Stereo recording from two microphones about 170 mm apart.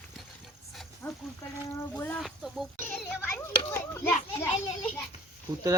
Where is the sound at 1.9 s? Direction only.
5° left (ahead or behind).